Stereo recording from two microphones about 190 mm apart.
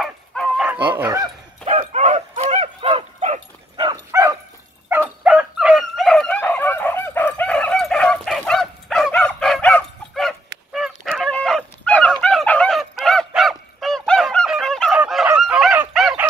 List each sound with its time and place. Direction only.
0.0 s bow-wow: centre (ahead or behind)
1.0 s dog: 20° right (ahead or behind)
1.7 s bow-wow: 35° right (ahead or behind)
4.1 s bow-wow: 20° right (ahead or behind)
4.9 s dog: 15° right (ahead or behind)